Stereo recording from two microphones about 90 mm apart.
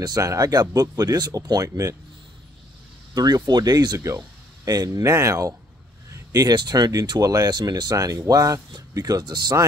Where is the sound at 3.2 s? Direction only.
45° right (ahead or behind).